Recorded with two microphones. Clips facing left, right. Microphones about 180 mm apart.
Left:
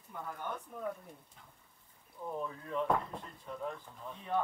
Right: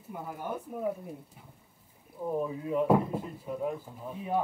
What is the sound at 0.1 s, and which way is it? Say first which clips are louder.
Speech: right 5 dB; 10° right (ahead or behind).